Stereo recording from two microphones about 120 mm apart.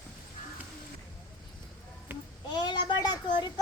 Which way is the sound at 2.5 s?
40° left (ahead or behind).